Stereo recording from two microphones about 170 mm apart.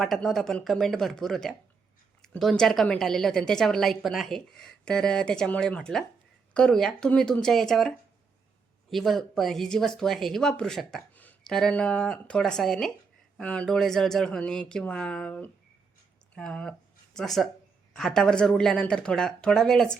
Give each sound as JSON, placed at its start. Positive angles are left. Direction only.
{"t": 0.0, "sound": "speech", "side_deg": 0}